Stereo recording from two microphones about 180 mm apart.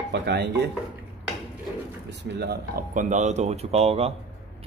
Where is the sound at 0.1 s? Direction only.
70° right (ahead or behind).